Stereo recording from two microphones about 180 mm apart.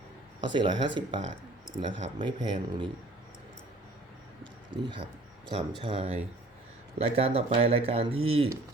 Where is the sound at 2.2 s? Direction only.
25° right (ahead or behind).